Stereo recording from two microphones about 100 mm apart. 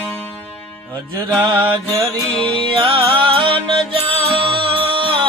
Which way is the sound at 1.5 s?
55° right (ahead or behind).